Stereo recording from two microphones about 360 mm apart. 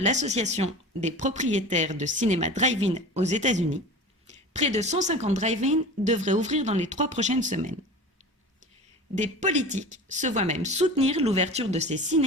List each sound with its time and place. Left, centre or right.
0.0 s speech: centre
9.1 s speech: centre